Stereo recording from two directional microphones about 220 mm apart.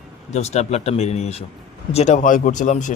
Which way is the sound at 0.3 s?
30° left (ahead or behind).